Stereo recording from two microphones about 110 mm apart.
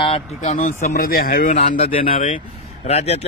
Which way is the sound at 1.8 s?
55° left (ahead or behind).